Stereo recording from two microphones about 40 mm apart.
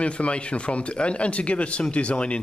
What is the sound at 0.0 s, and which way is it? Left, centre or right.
Speech, left.